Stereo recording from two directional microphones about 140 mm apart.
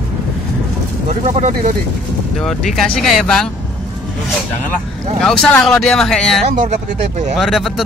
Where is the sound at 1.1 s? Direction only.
55° right (ahead or behind).